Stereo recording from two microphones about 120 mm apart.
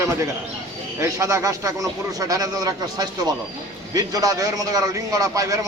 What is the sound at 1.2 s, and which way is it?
A man's voice, 25° right (ahead or behind).